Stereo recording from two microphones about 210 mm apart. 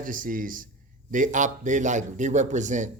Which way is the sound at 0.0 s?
40° right (ahead or behind).